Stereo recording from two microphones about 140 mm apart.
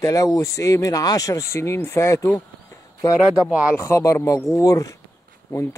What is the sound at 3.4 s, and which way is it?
Speech, 5° right (ahead or behind).